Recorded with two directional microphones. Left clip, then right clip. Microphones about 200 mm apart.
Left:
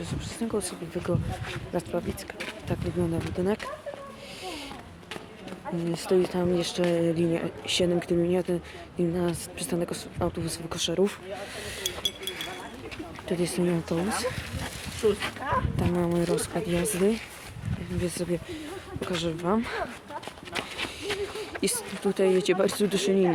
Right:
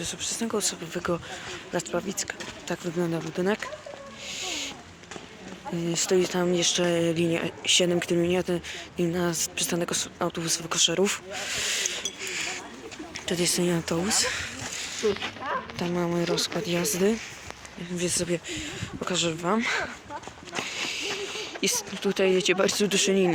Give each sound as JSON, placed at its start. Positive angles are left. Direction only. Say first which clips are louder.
{"t": 0.0, "sound": "speech", "louder": "right 4 dB", "side_deg": -10}
{"t": 4.4, "sound": "a sound", "louder": "right 6 dB", "side_deg": -15}
{"t": 5.9, "sound": "speech", "louder": "right 1 dB", "side_deg": -10}
{"t": 15.0, "sound": "speech", "louder": "left 2 dB", "side_deg": -35}
{"t": 16.0, "sound": "speech", "louder": "right 1 dB", "side_deg": 5}
{"t": 18.0, "sound": "speech", "louder": "right 3 dB", "side_deg": -5}
{"t": 21.5, "sound": "speech", "louder": "right 5 dB", "side_deg": -5}